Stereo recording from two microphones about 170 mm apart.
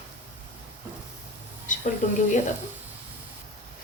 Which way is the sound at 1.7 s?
50° left (ahead or behind).